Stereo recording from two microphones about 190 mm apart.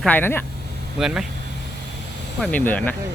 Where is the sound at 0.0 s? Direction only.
10° left (ahead or behind).